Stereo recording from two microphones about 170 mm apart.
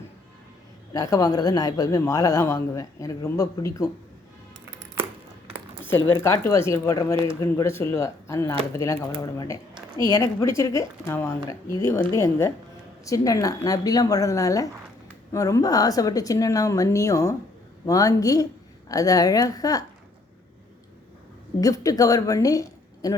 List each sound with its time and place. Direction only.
0.9 s speech: 20° left (ahead or behind)
5.8 s speech: 15° left (ahead or behind)
21.6 s a woman's voice: 20° left (ahead or behind)